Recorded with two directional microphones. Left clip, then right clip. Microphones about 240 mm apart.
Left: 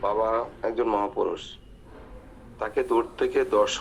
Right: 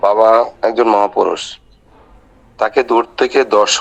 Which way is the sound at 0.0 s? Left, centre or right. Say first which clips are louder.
Right 15 dB; right.